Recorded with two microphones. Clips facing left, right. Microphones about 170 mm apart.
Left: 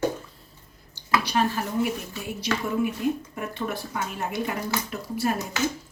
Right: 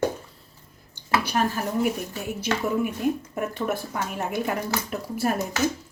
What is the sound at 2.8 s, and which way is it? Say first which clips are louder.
A woman's voice: even; 45° right (ahead or behind).